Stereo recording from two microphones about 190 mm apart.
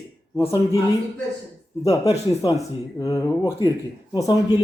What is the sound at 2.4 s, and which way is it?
Speech, 25° left (ahead or behind).